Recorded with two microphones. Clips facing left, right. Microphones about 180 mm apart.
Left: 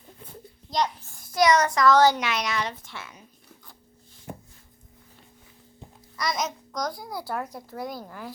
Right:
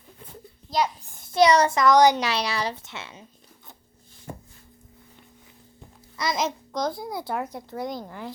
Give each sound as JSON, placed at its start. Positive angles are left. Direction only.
{"t": 0.7, "sound": "a child's voice", "side_deg": -10}
{"t": 1.2, "sound": "a child's voice", "side_deg": -25}
{"t": 2.2, "sound": "a woman's voice", "side_deg": -30}
{"t": 6.1, "sound": "a child's voice", "side_deg": -25}